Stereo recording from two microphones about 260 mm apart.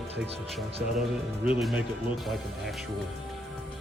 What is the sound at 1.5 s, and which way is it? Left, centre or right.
Speech, centre.